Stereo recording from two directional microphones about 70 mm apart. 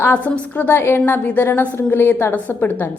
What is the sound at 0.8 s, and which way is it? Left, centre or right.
A woman's voice, left.